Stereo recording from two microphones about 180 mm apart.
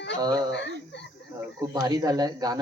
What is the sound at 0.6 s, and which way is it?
Speech, 75° left (ahead or behind).